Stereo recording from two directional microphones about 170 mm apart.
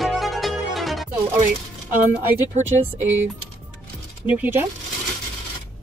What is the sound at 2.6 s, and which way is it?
Speech, 45° right (ahead or behind).